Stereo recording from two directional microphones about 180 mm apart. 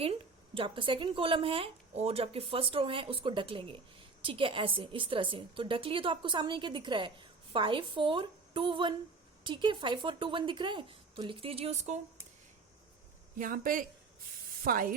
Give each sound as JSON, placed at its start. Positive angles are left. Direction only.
{"t": 0.0, "sound": "a woman's voice", "side_deg": -30}
{"t": 13.3, "sound": "speech", "side_deg": -50}